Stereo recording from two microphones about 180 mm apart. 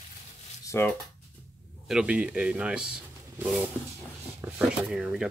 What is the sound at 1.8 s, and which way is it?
Speech, 5° right (ahead or behind).